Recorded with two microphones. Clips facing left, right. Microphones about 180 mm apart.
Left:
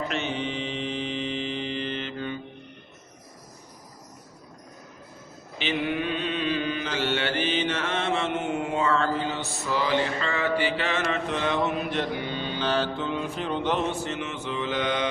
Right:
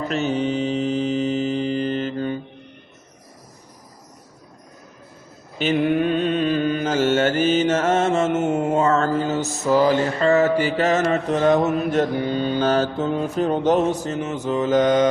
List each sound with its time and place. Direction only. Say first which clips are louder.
0.1 s mantra: right 8 dB; 40° right (ahead or behind)
5.5 s mantra: right 8 dB; 45° right (ahead or behind)